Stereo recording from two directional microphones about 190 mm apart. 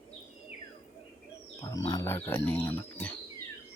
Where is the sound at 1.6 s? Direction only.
20° left (ahead or behind).